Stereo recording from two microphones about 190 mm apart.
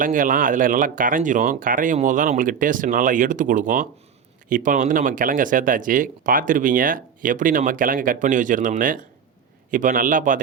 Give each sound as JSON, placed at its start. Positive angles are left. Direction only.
{"t": 0.0, "sound": "speech", "side_deg": -45}